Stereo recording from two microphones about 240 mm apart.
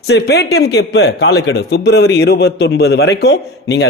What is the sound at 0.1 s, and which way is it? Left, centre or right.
A man's voice, left.